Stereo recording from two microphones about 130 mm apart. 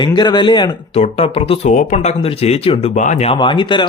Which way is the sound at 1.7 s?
70° left (ahead or behind).